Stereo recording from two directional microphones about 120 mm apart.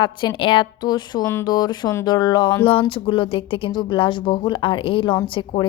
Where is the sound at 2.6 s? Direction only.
45° left (ahead or behind).